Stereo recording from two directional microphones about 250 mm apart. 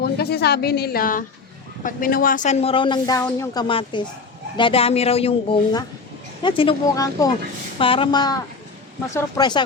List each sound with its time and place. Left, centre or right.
0.0 s a woman's voice: left; by 9.6 s centre